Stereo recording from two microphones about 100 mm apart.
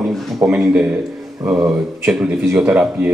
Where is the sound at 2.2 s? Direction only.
10° right (ahead or behind).